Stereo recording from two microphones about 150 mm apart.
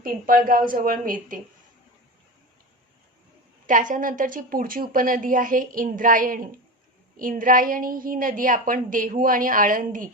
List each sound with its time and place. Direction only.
0.0 s a woman's voice: 70° right (ahead or behind)
3.7 s a woman's voice: 60° right (ahead or behind)